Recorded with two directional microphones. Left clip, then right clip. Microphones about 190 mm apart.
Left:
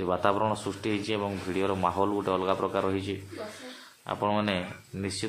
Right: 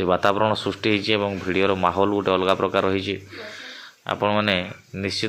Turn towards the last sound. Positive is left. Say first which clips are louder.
# right 8 dB
turn(degrees=-15)  # may be behind; listen again after turning